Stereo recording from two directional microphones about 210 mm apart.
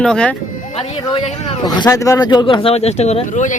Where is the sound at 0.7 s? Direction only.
30° left (ahead or behind).